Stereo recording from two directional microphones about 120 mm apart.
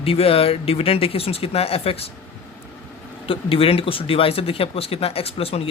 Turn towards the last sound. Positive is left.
turn(degrees=55)  # may be behind; listen again after turning